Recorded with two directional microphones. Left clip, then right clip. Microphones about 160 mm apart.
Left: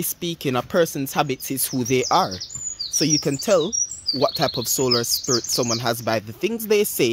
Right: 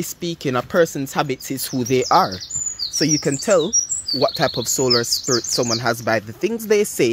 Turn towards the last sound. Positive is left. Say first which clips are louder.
# right 2 dB
turn(degrees=5)  # may be behind; listen again after turning